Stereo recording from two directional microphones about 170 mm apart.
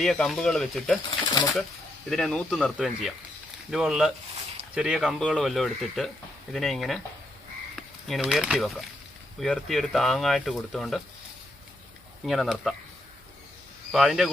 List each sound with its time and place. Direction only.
0.0 s speech: centre (ahead or behind)
2.0 s speech: 5° left (ahead or behind)
12.2 s speech: centre (ahead or behind)
13.9 s speech: centre (ahead or behind)